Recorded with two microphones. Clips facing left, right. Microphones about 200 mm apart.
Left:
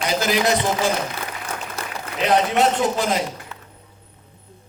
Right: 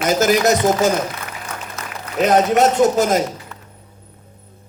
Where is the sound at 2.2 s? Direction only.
45° right (ahead or behind).